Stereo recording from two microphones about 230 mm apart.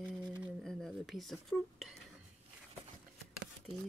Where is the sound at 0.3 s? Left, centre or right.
Centre.